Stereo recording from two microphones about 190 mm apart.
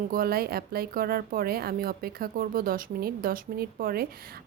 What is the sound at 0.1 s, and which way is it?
Speech, 50° right (ahead or behind).